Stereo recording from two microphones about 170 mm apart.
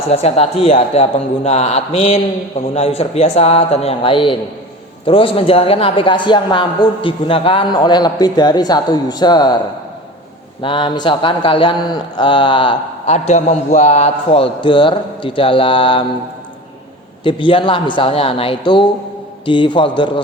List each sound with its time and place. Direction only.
0.1 s a man's voice: 35° left (ahead or behind)
10.6 s a man's voice: 30° left (ahead or behind)
13.1 s a man's voice: 40° left (ahead or behind)
17.2 s a man's voice: 30° left (ahead or behind)